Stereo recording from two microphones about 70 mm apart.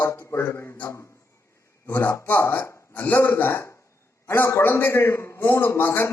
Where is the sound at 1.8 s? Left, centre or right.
Left.